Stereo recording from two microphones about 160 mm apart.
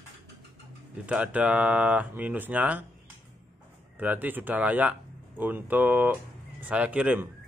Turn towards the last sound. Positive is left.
turn(degrees=-10)  # may be behind; listen again after turning